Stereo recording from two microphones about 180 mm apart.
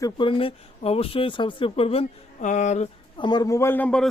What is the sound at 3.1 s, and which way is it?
Speech, 25° left (ahead or behind).